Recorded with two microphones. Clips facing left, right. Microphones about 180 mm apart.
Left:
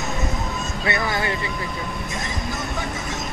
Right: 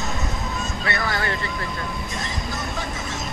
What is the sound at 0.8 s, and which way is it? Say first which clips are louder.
Vehicle: left 3 dB; 20° left (ahead or behind).